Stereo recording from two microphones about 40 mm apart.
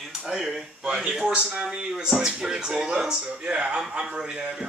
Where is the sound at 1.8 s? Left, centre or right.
Right.